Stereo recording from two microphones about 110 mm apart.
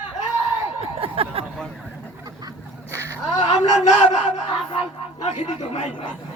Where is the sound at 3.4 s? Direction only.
90° left.